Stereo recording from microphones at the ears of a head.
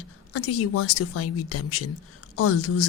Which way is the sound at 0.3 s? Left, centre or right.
Left.